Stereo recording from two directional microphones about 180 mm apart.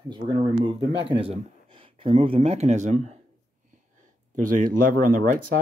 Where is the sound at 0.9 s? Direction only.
30° right (ahead or behind).